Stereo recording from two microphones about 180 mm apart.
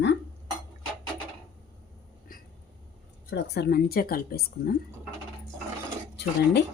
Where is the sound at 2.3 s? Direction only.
50° left (ahead or behind).